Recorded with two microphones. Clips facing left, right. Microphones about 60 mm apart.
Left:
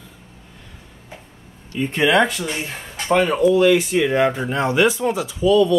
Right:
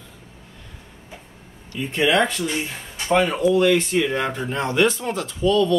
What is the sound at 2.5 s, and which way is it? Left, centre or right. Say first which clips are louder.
Speech: even; left.